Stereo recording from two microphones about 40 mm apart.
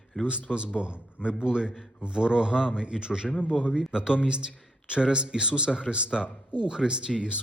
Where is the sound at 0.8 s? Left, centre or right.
Right.